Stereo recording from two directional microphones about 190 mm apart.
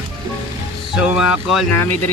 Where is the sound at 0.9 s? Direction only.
5° right (ahead or behind).